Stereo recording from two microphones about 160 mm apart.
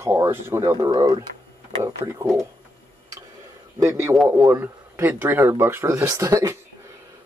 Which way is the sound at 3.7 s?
20° right (ahead or behind).